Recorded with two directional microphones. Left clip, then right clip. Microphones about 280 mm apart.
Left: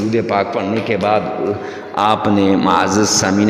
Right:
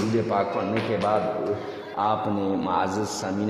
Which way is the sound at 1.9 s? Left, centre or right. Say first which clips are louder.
Left 10 dB; left.